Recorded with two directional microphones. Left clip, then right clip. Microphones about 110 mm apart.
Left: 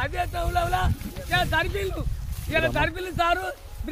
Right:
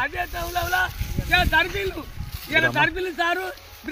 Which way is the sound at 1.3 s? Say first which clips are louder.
Right 4 dB; 75° left (ahead or behind).